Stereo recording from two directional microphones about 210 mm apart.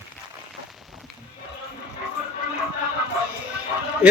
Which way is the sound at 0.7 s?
Centre (ahead or behind).